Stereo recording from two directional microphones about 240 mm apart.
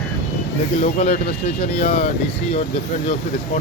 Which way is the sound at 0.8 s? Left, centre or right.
Left.